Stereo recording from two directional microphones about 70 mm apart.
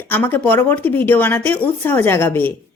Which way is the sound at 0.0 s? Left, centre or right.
Left.